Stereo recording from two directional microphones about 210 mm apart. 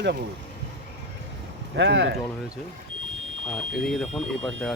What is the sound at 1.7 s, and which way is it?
Speech, 55° right (ahead or behind).